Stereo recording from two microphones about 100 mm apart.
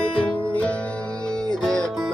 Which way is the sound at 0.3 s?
15° left (ahead or behind).